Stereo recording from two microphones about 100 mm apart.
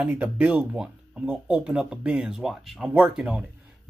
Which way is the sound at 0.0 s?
15° right (ahead or behind).